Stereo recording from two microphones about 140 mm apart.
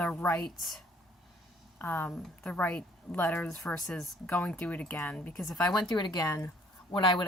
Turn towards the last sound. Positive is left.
turn(degrees=35)  # may be behind; listen again after turning